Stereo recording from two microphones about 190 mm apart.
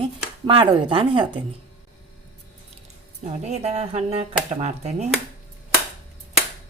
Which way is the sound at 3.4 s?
35° right (ahead or behind).